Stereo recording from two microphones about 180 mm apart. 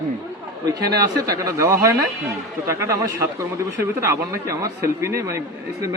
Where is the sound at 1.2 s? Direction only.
15° right (ahead or behind).